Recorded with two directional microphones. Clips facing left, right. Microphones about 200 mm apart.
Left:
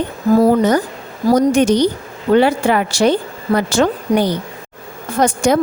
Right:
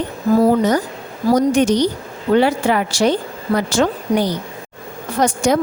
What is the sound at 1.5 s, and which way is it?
A woman's voice, 55° left (ahead or behind).